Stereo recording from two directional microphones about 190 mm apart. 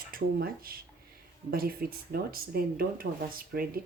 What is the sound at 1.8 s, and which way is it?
Speech, 50° right (ahead or behind).